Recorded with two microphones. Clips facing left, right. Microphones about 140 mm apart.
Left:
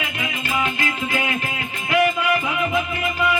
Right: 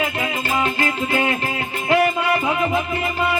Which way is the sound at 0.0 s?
35° right (ahead or behind).